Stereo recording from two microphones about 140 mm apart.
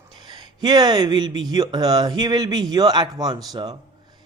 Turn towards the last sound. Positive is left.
turn(degrees=-30)  # may be behind; listen again after turning